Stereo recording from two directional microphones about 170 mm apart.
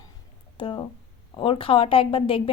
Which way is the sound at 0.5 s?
30° left (ahead or behind).